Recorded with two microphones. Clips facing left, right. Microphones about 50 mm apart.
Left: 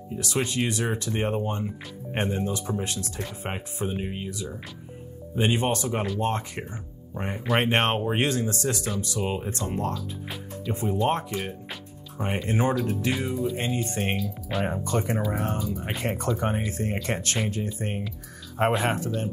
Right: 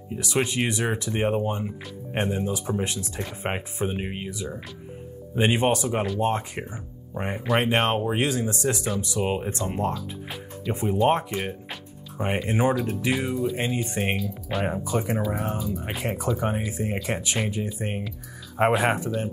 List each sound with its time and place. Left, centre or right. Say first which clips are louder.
0.1 s speech: right 2 dB; right
1.1 s speech: right 4 dB; centre
2.8 s speech: right 2 dB; right
7.7 s speech: right 1 dB; centre
8.3 s speech: right 1 dB; centre
9.9 s music: right 1 dB; centre
10.7 s speech: right 3 dB; right